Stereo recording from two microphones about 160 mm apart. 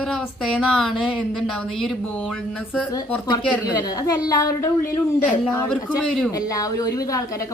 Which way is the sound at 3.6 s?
25° left (ahead or behind).